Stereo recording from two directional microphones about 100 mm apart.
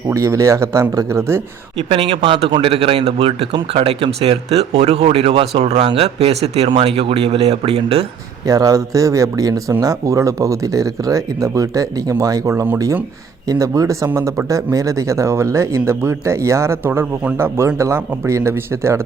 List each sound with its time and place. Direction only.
0.1 s speech: 30° right (ahead or behind)
1.9 s speech: 75° right (ahead or behind)
2.5 s speech: 65° right (ahead or behind); by 6.7 s 90° right
6.8 s speech: 75° right (ahead or behind)
8.4 s speech: 35° right (ahead or behind)